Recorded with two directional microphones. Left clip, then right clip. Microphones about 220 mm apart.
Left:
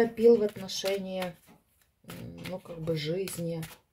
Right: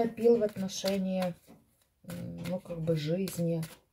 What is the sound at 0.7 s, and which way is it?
Speech, 50° left (ahead or behind).